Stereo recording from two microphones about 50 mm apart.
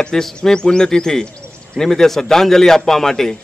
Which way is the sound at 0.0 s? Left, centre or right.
Centre.